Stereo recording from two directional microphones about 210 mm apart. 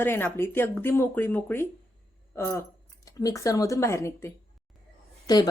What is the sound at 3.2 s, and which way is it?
A woman's voice, 15° left (ahead or behind).